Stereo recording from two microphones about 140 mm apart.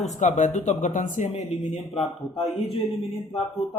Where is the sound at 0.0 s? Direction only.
55° left (ahead or behind).